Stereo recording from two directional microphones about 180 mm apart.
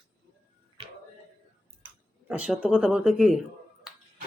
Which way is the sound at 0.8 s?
25° right (ahead or behind).